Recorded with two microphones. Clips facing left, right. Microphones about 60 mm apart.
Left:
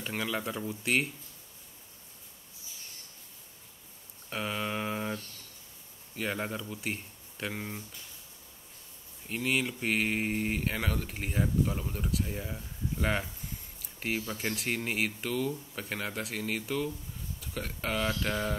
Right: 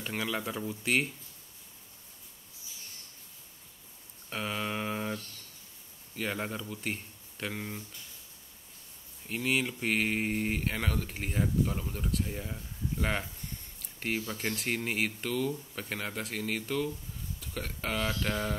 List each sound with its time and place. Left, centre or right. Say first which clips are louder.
0.0 s speech: even; centre
4.3 s a sound: left 1 dB; centre
6.1 s speech: left 1 dB; centre
9.3 s speech: even; centre